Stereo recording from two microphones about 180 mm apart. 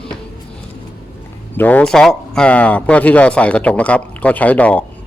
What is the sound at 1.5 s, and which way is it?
Speech, 10° left (ahead or behind).